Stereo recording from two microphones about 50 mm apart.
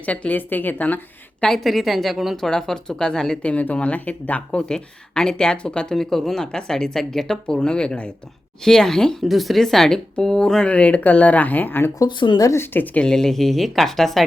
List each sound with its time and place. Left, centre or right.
0.0 s speech: left
1.5 s speech: centre
2.3 s speech: centre
3.4 s speech: left
4.7 s speech: centre
6.0 s speech: centre
8.6 s speech: centre
9.2 s speech: centre
10.7 s speech: left
13.1 s speech: centre